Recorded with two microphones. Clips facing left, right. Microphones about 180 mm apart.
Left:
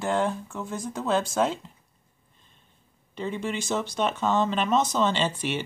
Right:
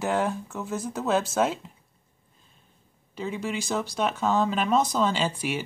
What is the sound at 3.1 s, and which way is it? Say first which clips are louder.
Speech: even; 5° right (ahead or behind).